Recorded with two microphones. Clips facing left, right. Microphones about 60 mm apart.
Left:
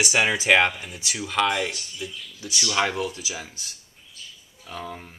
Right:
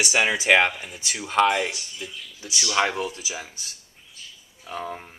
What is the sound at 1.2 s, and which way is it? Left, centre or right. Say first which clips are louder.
Speech: right 3 dB; right.